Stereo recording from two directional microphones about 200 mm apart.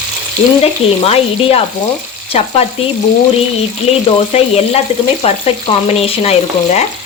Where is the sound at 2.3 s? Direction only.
30° left (ahead or behind).